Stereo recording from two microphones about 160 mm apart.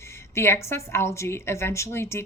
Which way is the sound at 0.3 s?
15° left (ahead or behind).